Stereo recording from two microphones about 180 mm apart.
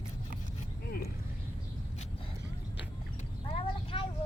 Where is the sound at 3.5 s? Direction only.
30° left (ahead or behind).